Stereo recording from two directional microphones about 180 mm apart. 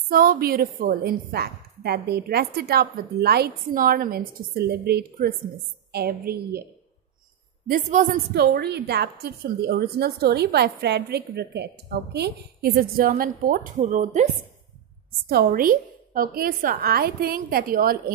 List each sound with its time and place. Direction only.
0.1 s a woman's voice: 55° right (ahead or behind)
7.6 s a woman's voice: 45° right (ahead or behind)
15.2 s a woman's voice: 55° right (ahead or behind)